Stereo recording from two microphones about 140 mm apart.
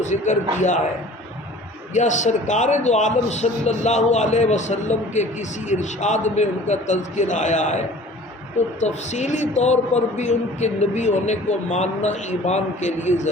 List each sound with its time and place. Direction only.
0.0 s a man's voice: 55° left (ahead or behind)
1.9 s a man's voice: 60° left (ahead or behind)
8.8 s a man's voice: 55° left (ahead or behind)